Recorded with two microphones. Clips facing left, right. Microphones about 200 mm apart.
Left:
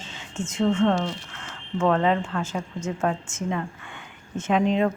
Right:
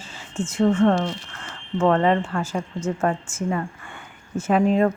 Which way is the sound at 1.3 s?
5° left (ahead or behind).